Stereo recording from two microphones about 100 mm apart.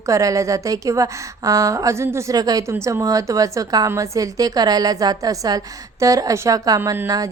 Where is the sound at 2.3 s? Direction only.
40° right (ahead or behind).